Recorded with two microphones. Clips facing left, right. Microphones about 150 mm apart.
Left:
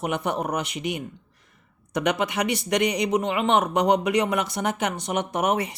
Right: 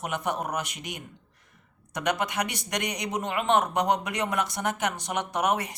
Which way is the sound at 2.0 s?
65° left (ahead or behind).